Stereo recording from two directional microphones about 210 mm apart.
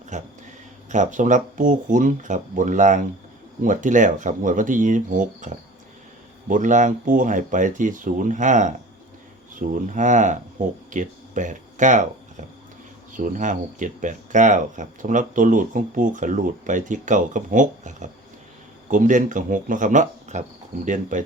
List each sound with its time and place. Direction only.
0.1 s speech: 35° right (ahead or behind)
13.1 s speech: 40° right (ahead or behind)